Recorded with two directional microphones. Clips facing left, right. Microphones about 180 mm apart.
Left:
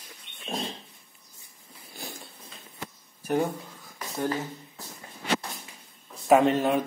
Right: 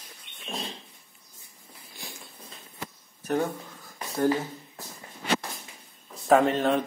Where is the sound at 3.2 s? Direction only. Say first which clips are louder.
Left 1 dB; 15° left (ahead or behind).